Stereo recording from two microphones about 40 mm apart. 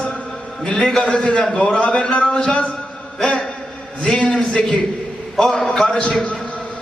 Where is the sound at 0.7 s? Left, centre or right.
Centre.